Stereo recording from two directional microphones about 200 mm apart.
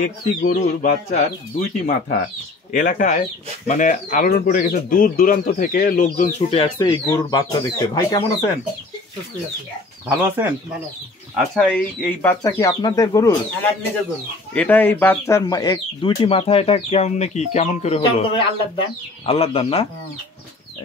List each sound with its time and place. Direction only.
0.4 s speech: 40° left (ahead or behind)
6.6 s speech: 20° left (ahead or behind)
10.0 s speech: 10° right (ahead or behind)
11.3 s speech: 5° left (ahead or behind); by 19.9 s 30° left (ahead or behind)